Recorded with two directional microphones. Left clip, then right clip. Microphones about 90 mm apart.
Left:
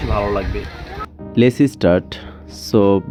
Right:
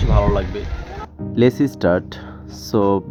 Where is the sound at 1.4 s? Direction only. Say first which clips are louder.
Left 2 dB; 40° left (ahead or behind).